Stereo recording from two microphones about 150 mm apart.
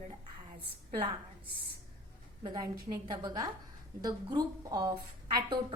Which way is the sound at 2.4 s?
30° right (ahead or behind).